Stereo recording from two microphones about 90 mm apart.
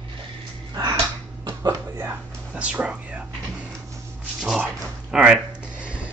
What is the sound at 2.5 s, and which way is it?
Speech, 15° right (ahead or behind).